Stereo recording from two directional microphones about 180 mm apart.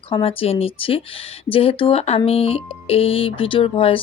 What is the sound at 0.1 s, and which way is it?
Speech, 30° left (ahead or behind).